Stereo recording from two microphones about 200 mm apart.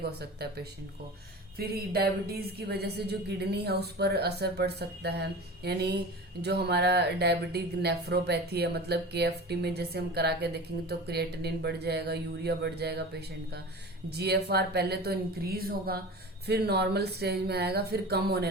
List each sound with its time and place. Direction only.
0.2 s a woman's voice: 55° right (ahead or behind)